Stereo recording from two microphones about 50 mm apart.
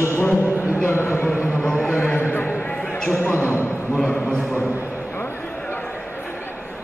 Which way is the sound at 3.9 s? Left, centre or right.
Centre.